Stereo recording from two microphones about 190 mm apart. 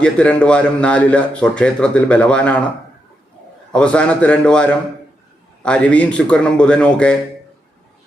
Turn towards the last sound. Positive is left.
turn(degrees=5)  # may be behind; listen again after turning